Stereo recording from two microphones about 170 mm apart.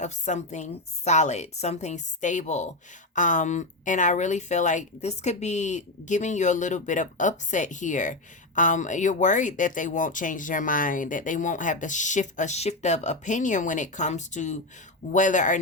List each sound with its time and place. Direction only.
0.0 s speech: 45° left (ahead or behind)